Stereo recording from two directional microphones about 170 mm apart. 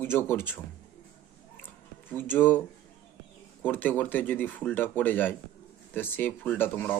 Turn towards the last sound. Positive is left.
turn(degrees=10)  # may be behind; listen again after turning